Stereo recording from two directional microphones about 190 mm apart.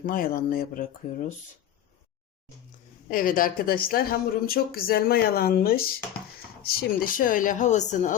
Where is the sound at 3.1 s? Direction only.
45° left (ahead or behind).